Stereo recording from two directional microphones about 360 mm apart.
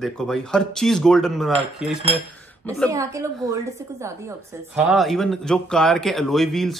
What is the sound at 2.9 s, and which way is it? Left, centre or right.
Speech, centre.